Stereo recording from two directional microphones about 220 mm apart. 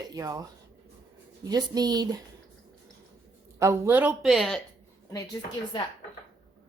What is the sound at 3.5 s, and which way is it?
A woman's voice, 15° right (ahead or behind).